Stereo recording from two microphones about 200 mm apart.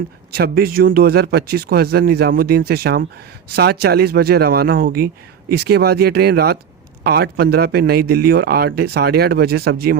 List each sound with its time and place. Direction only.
0.3 s speech: 50° right (ahead or behind)